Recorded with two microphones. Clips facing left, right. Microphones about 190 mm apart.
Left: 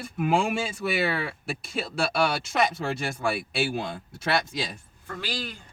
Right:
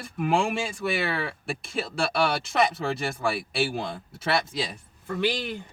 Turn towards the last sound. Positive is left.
turn(degrees=-20)  # may be behind; listen again after turning